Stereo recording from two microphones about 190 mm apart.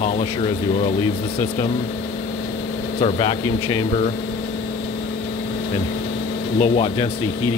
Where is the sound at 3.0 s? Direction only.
25° left (ahead or behind).